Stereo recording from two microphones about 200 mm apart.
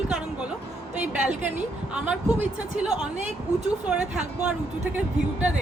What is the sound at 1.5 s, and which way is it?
Speech, 5° right (ahead or behind).